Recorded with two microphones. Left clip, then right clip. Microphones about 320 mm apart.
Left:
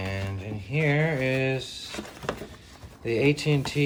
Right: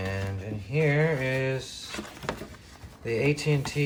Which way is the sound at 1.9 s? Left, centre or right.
Centre.